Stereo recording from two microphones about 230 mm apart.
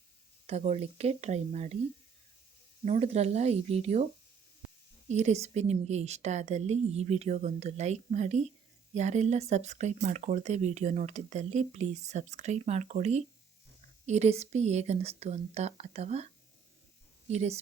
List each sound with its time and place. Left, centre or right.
0.4 s speech: right
2.8 s speech: right
5.0 s speech: right